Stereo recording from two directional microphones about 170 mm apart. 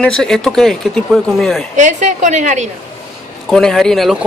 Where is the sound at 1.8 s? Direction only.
45° right (ahead or behind).